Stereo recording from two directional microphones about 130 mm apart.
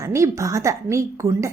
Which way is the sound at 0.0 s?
25° right (ahead or behind).